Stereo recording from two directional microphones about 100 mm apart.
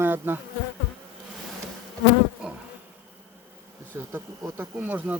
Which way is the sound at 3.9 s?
20° right (ahead or behind).